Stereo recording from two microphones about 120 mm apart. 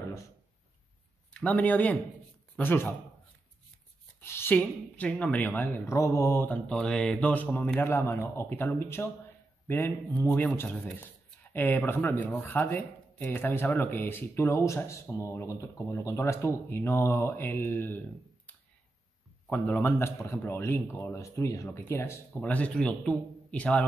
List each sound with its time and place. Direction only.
1.3 s a man's voice: 10° left (ahead or behind)
4.2 s speech: 20° left (ahead or behind)
5.9 s speech: 25° left (ahead or behind)
19.5 s speech: 10° left (ahead or behind)
19.8 s speech: 25° left (ahead or behind)
22.4 s speech: 10° left (ahead or behind)